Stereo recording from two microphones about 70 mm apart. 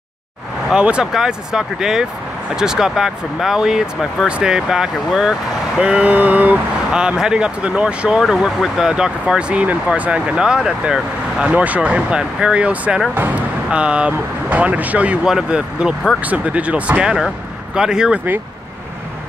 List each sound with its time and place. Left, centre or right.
0.7 s speech: centre
6.9 s speech: centre
8.2 s speech: centre
11.5 s speech: right
13.1 s speech: right
13.7 s speech: centre
15.2 s speech: centre
16.2 s speech: right